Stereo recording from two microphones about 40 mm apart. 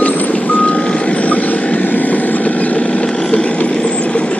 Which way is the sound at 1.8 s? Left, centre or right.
Left.